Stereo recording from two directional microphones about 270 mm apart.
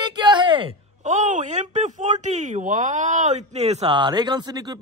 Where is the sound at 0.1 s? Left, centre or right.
Centre.